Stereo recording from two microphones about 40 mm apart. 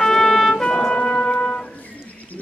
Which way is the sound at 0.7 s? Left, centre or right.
Left.